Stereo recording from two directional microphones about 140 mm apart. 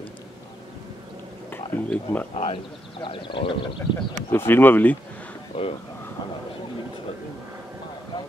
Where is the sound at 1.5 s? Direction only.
10° left (ahead or behind).